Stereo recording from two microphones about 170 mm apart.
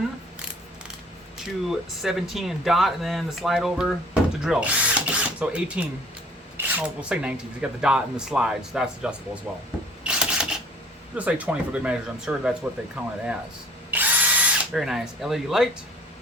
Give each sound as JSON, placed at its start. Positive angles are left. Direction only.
{"t": 1.6, "sound": "speech", "side_deg": 0}
{"t": 10.0, "sound": "camera", "side_deg": -5}
{"t": 11.1, "sound": "speech", "side_deg": -10}
{"t": 13.9, "sound": "drill", "side_deg": -10}